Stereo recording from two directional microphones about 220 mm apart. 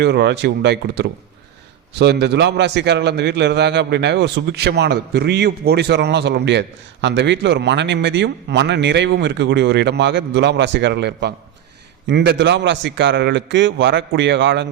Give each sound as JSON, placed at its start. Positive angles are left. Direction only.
{"t": 0.0, "sound": "a man's voice", "side_deg": -50}